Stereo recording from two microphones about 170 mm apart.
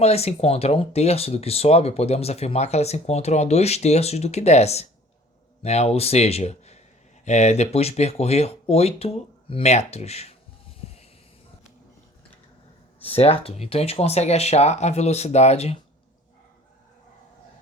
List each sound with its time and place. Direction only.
0.0 s speech: 40° left (ahead or behind)
13.0 s speech: 35° left (ahead or behind)